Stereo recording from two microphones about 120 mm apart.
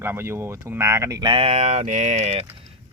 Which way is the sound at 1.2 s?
50° right (ahead or behind).